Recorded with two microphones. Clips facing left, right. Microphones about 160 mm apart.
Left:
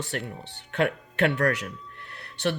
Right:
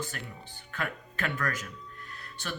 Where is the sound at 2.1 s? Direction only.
70° left (ahead or behind).